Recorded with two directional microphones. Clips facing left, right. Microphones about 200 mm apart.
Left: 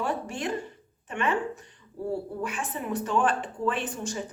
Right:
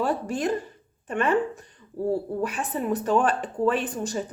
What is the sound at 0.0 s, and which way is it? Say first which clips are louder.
Speech: right 5 dB; 35° right (ahead or behind).